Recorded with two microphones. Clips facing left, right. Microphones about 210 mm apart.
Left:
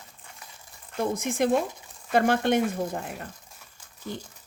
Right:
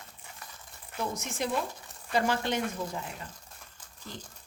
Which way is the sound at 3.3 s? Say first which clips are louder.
Left 3 dB; 10° left (ahead or behind).